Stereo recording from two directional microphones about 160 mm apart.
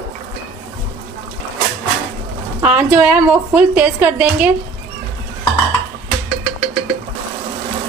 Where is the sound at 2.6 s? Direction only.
10° right (ahead or behind).